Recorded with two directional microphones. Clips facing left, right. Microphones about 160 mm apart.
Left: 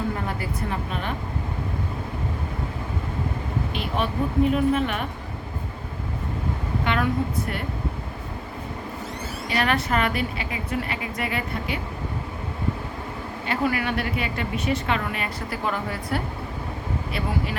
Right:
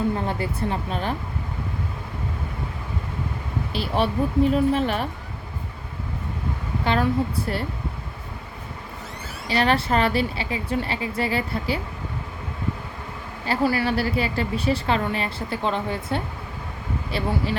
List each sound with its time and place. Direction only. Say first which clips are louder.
0.3 s a woman's voice: right 3 dB; 30° right (ahead or behind)
3.7 s a woman's voice: right 6 dB; 35° right (ahead or behind)
6.8 s a woman's voice: right 3 dB; 30° right (ahead or behind)
9.5 s a woman's voice: right 3 dB; 30° right (ahead or behind)
13.4 s a woman's voice: right 3 dB; 35° right (ahead or behind)